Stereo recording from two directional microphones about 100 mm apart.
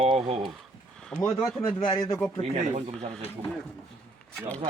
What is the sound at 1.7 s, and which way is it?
Speech, 45° left (ahead or behind).